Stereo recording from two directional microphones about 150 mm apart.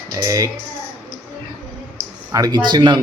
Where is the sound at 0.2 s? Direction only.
20° right (ahead or behind).